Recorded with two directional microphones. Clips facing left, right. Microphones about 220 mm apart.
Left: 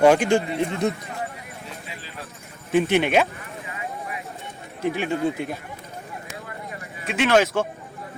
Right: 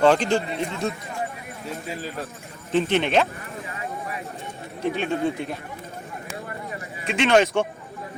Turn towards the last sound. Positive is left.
turn(degrees=0)  # may be behind; listen again after turning